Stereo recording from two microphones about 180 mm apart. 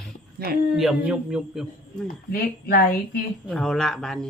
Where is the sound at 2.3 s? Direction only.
55° left (ahead or behind).